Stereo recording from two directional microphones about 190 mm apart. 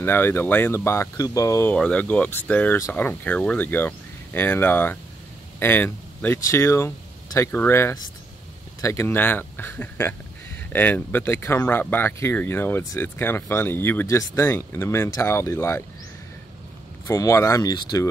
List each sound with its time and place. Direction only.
0.0 s speech: 10° left (ahead or behind)
17.1 s speech: 15° left (ahead or behind)